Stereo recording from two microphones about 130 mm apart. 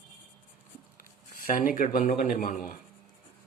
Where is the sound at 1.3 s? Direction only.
90° left.